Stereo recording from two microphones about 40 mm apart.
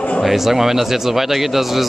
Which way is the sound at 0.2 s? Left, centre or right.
Centre.